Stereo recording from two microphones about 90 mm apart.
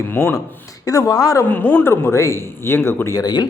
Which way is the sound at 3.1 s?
45° left (ahead or behind).